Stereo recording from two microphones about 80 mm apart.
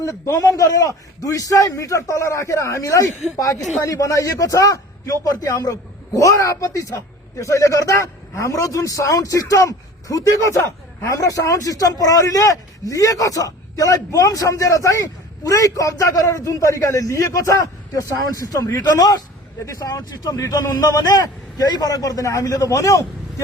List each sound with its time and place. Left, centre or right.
0.0 s a man's voice: left